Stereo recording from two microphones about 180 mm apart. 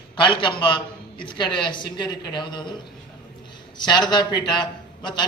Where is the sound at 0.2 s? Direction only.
25° left (ahead or behind).